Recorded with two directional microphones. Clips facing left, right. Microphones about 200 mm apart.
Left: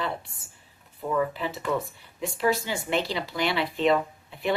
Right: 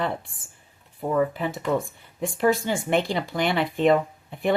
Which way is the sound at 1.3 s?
50° right (ahead or behind).